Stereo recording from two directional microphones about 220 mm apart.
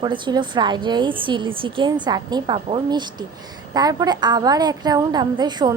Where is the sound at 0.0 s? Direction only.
20° right (ahead or behind).